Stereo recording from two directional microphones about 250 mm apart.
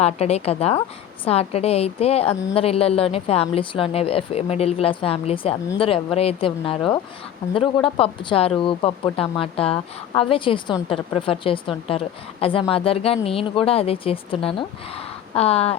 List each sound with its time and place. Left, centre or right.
0.0 s speech: left
7.9 s speech: left